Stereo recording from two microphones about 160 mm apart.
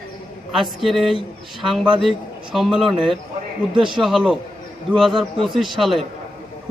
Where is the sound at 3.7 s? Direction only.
30° right (ahead or behind).